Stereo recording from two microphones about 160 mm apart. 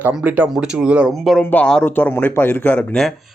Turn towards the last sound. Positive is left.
turn(degrees=5)  # may be behind; listen again after turning